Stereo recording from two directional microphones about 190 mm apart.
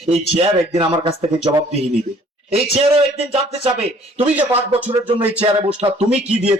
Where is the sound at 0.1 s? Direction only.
30° right (ahead or behind).